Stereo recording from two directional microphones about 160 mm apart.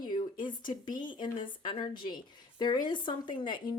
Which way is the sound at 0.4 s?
30° left (ahead or behind).